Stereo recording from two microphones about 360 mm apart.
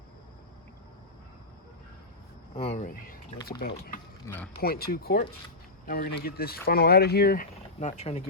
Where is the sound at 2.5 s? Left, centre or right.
Centre.